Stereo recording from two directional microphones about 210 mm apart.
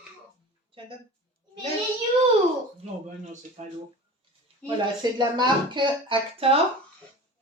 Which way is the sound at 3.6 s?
35° right (ahead or behind).